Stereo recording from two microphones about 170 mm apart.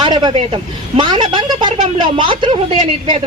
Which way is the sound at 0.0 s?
25° right (ahead or behind).